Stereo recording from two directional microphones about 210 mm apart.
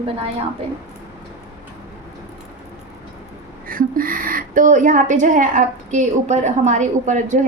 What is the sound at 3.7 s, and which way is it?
A woman's voice, 40° right (ahead or behind).